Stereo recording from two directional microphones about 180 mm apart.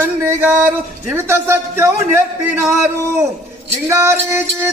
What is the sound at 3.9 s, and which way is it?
Speech, 15° right (ahead or behind).